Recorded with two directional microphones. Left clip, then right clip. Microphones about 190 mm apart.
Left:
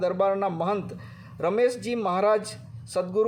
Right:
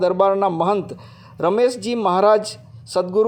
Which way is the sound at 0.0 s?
25° right (ahead or behind).